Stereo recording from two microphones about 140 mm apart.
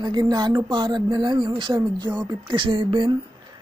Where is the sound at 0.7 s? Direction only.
30° right (ahead or behind).